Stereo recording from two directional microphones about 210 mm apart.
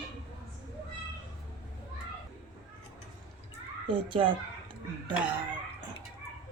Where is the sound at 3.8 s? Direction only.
25° right (ahead or behind).